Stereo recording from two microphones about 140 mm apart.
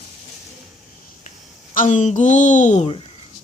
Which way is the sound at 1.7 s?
65° left (ahead or behind).